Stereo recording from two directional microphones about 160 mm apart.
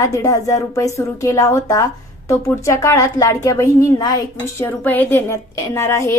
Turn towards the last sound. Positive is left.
turn(degrees=15)  # may be behind; listen again after turning